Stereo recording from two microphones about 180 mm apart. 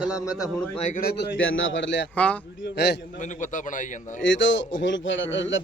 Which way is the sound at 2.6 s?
70° left (ahead or behind).